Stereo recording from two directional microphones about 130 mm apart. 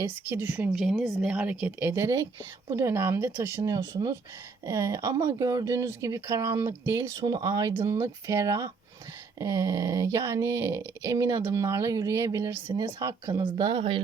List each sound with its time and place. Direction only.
0.0 s speech: 15° right (ahead or behind)
0.7 s speech: centre (ahead or behind); by 14.0 s 40° right (ahead or behind)